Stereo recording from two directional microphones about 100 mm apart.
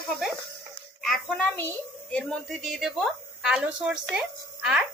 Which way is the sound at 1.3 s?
20° left (ahead or behind).